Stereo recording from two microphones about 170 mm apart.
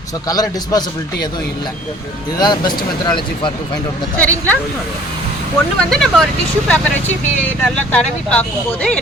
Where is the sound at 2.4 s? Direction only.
25° left (ahead or behind).